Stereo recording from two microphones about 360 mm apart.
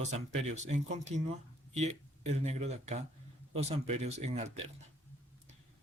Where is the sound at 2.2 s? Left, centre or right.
Centre.